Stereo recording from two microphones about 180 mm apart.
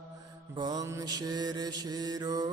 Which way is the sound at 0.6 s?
20° right (ahead or behind).